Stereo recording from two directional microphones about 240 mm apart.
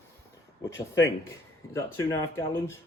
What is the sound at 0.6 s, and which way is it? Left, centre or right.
Speech, centre.